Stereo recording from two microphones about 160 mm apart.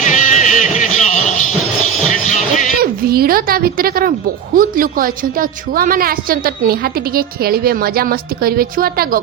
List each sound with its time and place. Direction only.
0.0 s music: 50° left (ahead or behind)
2.8 s a sound: 70° right (ahead or behind)
4.5 s a woman's voice: 60° right (ahead or behind)